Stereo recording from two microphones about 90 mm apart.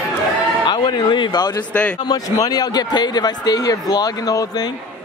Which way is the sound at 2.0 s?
45° left (ahead or behind).